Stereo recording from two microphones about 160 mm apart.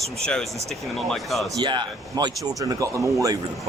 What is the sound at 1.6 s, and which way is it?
A man's voice, 30° right (ahead or behind).